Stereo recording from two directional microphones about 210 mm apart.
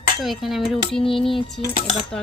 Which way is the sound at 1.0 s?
25° left (ahead or behind).